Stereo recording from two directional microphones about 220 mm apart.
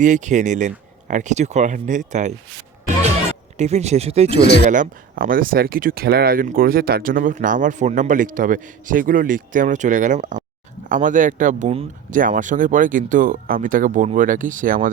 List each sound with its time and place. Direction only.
0.0 s speech: 35° right (ahead or behind)
3.6 s speech: 30° right (ahead or behind)